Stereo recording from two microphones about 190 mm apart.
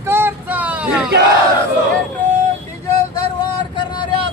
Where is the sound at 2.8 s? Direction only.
20° left (ahead or behind).